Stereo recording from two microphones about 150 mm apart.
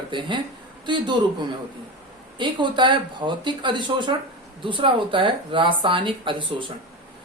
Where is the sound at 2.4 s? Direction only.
30° right (ahead or behind).